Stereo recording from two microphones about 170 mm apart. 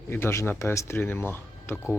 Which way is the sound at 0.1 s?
15° left (ahead or behind).